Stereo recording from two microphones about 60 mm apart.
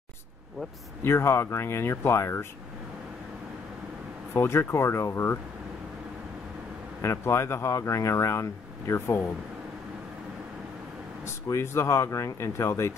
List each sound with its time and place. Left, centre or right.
1.0 s speech: left
4.3 s speech: left
7.0 s speech: left
11.5 s speech: left